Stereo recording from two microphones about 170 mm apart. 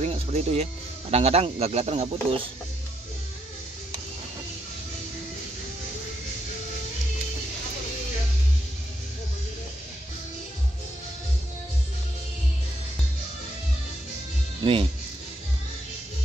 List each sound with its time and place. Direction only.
0.0 s speech: 40° right (ahead or behind)
14.6 s speech: 30° right (ahead or behind)